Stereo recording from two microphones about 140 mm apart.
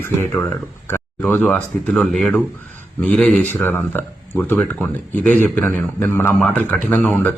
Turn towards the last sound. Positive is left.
turn(degrees=10)  # may be behind; listen again after turning